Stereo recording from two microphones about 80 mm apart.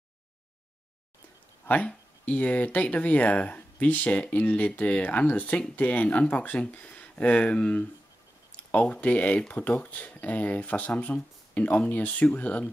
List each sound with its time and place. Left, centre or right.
1.7 s speech: centre